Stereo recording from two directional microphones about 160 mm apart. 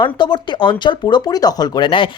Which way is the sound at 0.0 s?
30° left (ahead or behind).